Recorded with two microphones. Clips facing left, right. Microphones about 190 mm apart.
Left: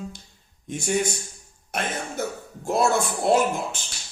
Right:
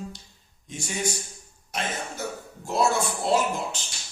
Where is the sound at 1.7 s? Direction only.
55° left (ahead or behind).